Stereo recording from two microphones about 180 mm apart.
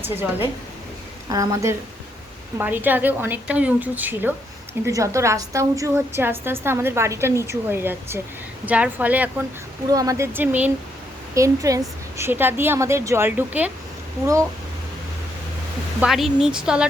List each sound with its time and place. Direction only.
0.0 s a woman's voice: 10° right (ahead or behind)
9.9 s a woman's voice: 20° right (ahead or behind)
16.0 s speech: centre (ahead or behind)